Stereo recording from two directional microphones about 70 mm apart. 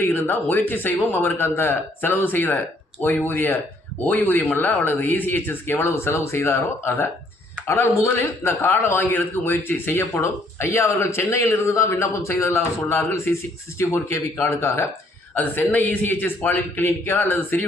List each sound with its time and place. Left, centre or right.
0.0 s speech: left
8.4 s speech: left
13.3 s speech: left
15.4 s speech: left